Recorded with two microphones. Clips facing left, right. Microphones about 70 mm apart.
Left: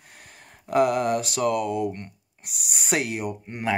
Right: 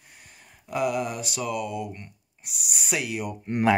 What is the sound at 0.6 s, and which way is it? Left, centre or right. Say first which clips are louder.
Speech: left 6 dB; left.